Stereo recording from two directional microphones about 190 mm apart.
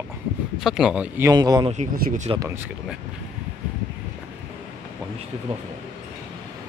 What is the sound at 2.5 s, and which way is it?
Speech, 10° right (ahead or behind).